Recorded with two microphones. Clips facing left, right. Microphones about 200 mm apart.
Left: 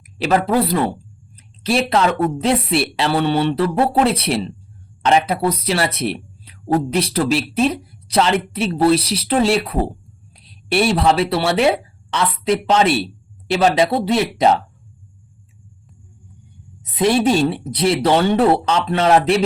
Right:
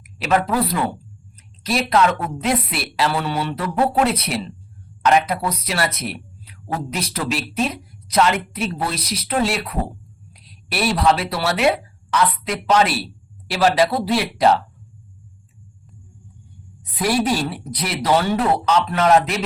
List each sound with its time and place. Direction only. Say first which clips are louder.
0.0 s a woman's voice: left 2 dB; 30° left (ahead or behind)
16.9 s speech: left 5 dB; 25° left (ahead or behind)